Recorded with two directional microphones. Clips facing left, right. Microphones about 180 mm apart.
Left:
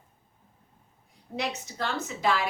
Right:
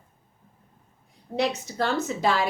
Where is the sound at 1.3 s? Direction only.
35° right (ahead or behind).